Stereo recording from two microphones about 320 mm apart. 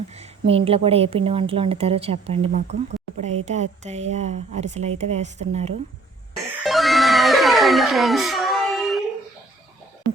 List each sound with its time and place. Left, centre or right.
0.1 s a woman's voice: centre
6.6 s music: centre